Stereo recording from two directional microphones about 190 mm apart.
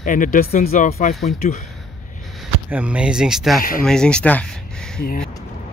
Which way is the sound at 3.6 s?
50° left (ahead or behind).